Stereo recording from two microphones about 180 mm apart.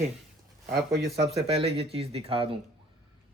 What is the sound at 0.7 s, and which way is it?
Speech, 65° right (ahead or behind).